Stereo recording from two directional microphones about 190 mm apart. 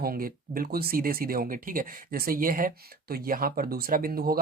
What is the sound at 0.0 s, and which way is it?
Speech, 50° right (ahead or behind).